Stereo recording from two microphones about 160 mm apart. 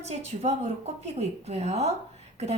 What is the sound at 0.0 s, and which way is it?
A woman's voice, 45° right (ahead or behind).